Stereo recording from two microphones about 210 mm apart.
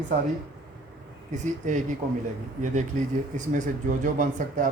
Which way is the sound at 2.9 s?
40° right (ahead or behind).